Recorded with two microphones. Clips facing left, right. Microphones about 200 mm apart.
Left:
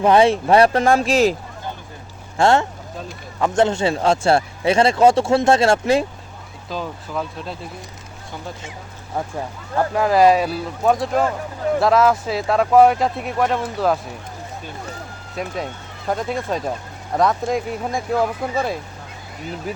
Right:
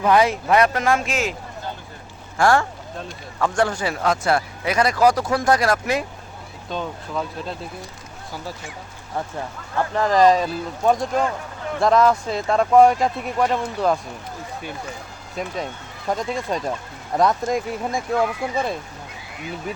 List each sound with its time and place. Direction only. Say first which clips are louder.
0.0 s speech: left 4 dB; 30° left (ahead or behind)
2.4 s speech: left 2 dB; 25° left (ahead or behind)
6.7 s speech: even; centre (ahead or behind)
9.1 s speech: left 2 dB; 10° left (ahead or behind)
15.4 s speech: left 1 dB; centre (ahead or behind)